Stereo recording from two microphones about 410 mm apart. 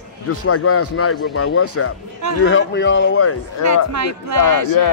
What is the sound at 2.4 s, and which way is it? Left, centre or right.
Speech, left.